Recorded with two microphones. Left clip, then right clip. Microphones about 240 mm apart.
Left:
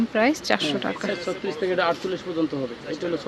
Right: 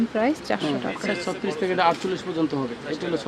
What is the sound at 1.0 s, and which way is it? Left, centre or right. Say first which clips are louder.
Speech: right 1 dB; right.